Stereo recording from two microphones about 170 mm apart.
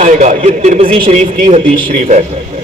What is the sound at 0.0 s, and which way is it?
Speech, 45° right (ahead or behind).